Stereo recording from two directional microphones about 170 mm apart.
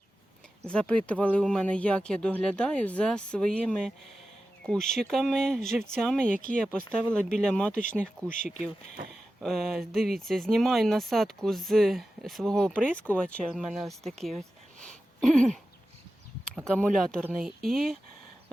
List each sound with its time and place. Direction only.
0.7 s speech: 5° left (ahead or behind)
8.3 s speech: 50° left (ahead or behind)
9.4 s speech: centre (ahead or behind)
14.8 s a sound: 5° left (ahead or behind)
16.6 s speech: 5° left (ahead or behind)